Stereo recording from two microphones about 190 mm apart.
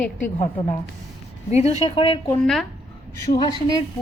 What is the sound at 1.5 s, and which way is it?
Speech, 35° left (ahead or behind).